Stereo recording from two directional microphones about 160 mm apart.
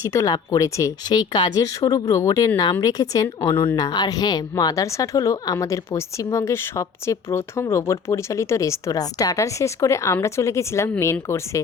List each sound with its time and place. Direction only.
0.1 s speech: 20° left (ahead or behind)